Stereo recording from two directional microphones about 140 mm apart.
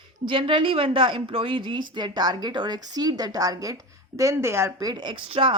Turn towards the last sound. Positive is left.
turn(degrees=-35)  # may be behind; listen again after turning